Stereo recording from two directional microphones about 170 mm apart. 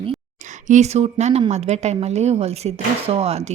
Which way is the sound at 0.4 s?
45° right (ahead or behind).